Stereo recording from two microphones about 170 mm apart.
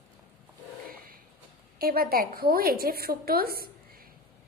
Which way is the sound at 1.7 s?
60° right (ahead or behind).